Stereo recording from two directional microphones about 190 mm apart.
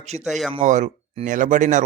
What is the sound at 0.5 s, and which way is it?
Speech, 40° right (ahead or behind).